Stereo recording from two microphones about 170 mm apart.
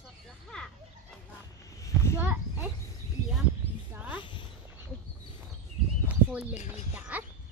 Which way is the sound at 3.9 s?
10° right (ahead or behind).